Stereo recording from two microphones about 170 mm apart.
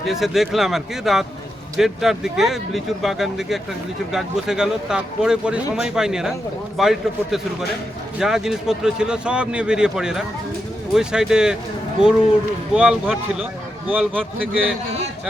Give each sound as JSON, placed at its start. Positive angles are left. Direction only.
{"t": 0.1, "sound": "a man's voice", "side_deg": 0}